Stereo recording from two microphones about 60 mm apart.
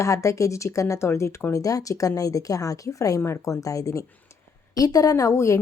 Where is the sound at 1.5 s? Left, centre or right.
Left.